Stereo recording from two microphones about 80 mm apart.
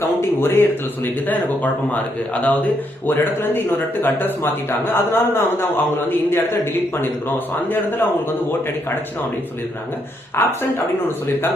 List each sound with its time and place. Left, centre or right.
0.2 s a man's voice: left
10.4 s a man's voice: left